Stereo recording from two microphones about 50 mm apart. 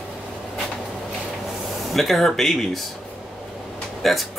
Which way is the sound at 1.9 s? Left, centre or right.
Centre.